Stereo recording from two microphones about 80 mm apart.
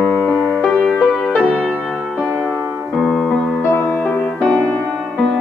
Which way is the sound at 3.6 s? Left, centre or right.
Left.